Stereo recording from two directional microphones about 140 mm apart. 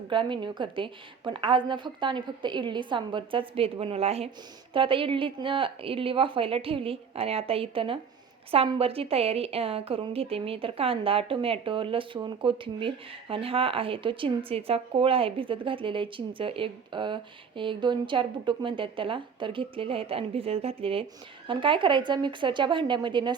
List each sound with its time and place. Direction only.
0.1 s a woman's voice: 35° right (ahead or behind)